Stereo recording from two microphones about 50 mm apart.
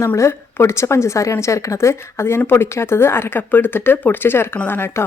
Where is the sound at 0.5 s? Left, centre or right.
Left.